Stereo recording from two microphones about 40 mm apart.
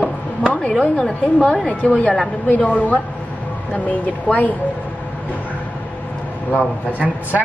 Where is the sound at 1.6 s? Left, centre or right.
Left.